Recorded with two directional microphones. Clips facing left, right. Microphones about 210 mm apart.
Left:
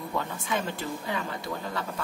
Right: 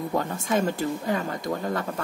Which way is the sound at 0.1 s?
45° right (ahead or behind).